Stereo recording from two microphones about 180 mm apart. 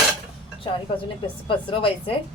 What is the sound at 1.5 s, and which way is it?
Speech, 30° left (ahead or behind).